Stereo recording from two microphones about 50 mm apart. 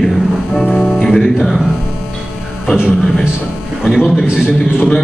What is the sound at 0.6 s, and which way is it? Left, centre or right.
Music, centre.